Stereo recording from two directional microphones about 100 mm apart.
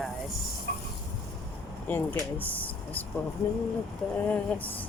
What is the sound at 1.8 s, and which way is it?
Speech, 15° left (ahead or behind).